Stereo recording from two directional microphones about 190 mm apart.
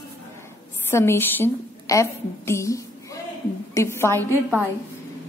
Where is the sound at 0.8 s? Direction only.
15° left (ahead or behind).